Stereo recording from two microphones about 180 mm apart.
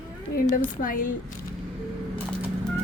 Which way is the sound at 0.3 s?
55° left (ahead or behind).